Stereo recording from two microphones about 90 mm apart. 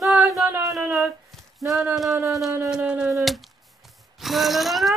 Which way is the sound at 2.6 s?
10° right (ahead or behind).